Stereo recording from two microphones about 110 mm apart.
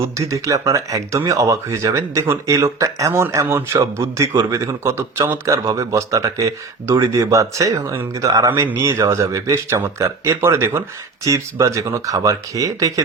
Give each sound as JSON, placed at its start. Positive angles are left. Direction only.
{"t": 0.2, "sound": "speech", "side_deg": -30}